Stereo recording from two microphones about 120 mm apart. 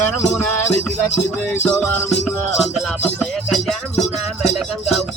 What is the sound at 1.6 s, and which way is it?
Music, 15° left (ahead or behind).